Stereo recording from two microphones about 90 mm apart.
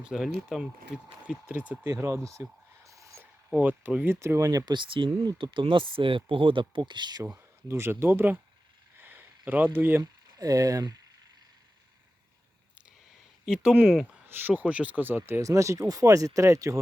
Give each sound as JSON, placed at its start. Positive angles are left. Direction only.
{"t": 0.0, "sound": "speech", "side_deg": -5}
{"t": 1.8, "sound": "a sound", "side_deg": -25}
{"t": 3.5, "sound": "speech", "side_deg": -20}
{"t": 7.7, "sound": "speech", "side_deg": -30}
{"t": 9.0, "sound": "a sound", "side_deg": -20}
{"t": 10.0, "sound": "speech", "side_deg": -40}
{"t": 13.4, "sound": "speech", "side_deg": -5}
{"t": 14.3, "sound": "speech", "side_deg": -20}
{"t": 15.4, "sound": "speech", "side_deg": -35}